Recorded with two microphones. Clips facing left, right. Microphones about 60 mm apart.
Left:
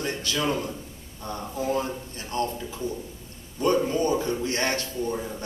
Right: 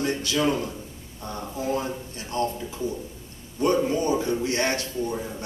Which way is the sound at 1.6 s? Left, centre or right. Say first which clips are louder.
Even; centre.